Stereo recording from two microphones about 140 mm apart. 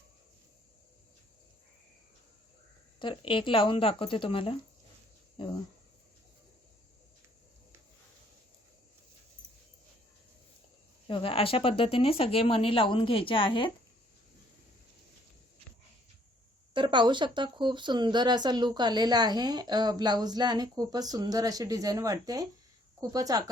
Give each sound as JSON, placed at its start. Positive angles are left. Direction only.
{"t": 3.0, "sound": "speech", "side_deg": 35}
{"t": 11.1, "sound": "speech", "side_deg": 40}
{"t": 16.7, "sound": "speech", "side_deg": -35}